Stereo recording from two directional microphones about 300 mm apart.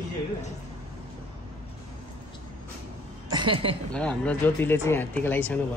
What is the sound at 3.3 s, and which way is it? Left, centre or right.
Speech, centre.